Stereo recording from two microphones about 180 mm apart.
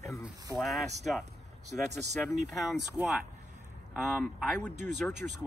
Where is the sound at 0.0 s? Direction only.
15° left (ahead or behind).